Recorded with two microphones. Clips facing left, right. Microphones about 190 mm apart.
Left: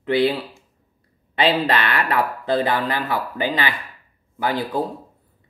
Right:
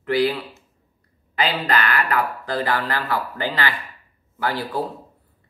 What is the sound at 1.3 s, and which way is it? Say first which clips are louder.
Speech: left 3 dB; 30° left (ahead or behind).